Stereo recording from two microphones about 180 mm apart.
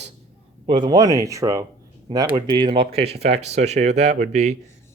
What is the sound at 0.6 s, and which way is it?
Speech, 25° right (ahead or behind).